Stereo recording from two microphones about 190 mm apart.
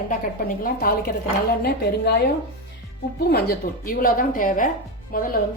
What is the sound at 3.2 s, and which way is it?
A woman's voice, 55° left (ahead or behind).